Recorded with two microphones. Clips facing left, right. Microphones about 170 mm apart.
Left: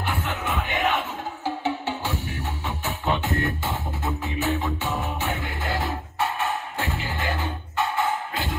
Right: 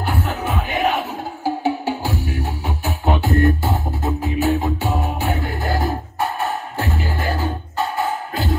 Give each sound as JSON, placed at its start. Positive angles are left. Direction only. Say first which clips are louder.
{"t": 0.0, "sound": "music", "louder": "right 5 dB", "side_deg": -40}